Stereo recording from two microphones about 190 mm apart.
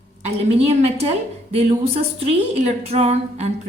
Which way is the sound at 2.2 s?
35° right (ahead or behind).